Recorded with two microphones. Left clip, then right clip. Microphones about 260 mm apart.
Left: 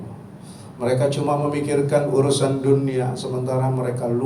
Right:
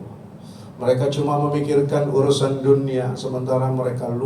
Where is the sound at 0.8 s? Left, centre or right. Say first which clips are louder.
Right 1 dB; left.